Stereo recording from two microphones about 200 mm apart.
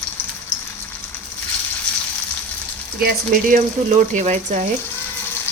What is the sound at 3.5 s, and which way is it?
Speech, 35° right (ahead or behind).